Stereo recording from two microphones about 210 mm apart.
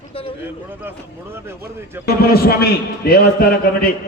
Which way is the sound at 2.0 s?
45° left (ahead or behind).